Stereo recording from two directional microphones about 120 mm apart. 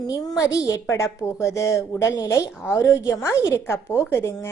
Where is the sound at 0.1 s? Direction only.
30° left (ahead or behind).